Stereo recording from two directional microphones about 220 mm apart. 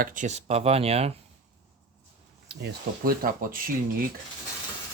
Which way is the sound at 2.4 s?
45° right (ahead or behind).